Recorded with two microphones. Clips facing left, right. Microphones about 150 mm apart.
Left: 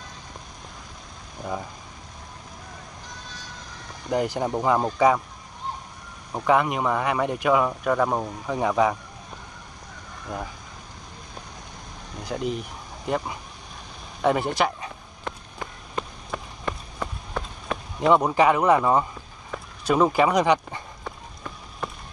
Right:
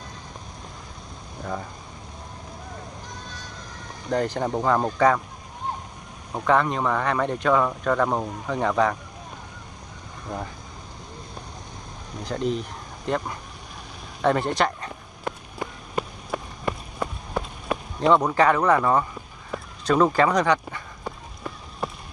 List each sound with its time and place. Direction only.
4.1 s speech: 10° left (ahead or behind)
6.4 s speech: 10° left (ahead or behind)
12.3 s speech: 5° left (ahead or behind)
15.2 s a sound: 10° right (ahead or behind)
18.0 s speech: 15° left (ahead or behind)